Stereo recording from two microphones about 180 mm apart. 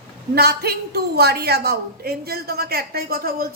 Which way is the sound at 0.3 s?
60° right (ahead or behind).